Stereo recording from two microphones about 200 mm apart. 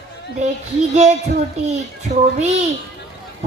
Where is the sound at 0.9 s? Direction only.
35° right (ahead or behind).